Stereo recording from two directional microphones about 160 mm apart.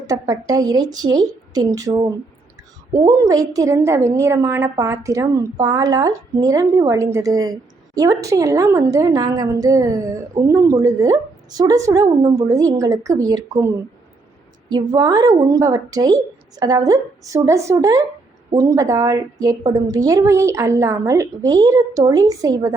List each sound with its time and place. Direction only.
0.1 s a woman's voice: 20° right (ahead or behind)